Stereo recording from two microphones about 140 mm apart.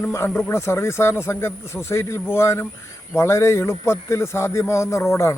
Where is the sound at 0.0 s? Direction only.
20° left (ahead or behind).